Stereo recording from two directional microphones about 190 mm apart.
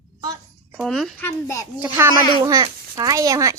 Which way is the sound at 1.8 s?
15° right (ahead or behind).